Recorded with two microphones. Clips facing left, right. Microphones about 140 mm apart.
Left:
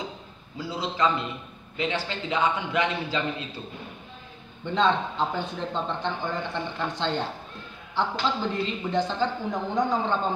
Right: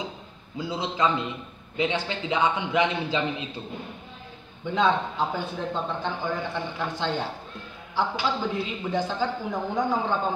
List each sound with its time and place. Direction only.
0.6 s a man's voice: 20° right (ahead or behind)
4.6 s a man's voice: 5° right (ahead or behind)